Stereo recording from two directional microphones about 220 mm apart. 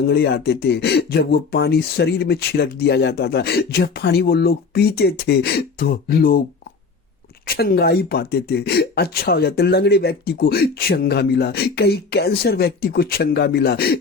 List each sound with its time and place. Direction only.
0.1 s speech: 45° left (ahead or behind)
7.4 s speech: 45° left (ahead or behind)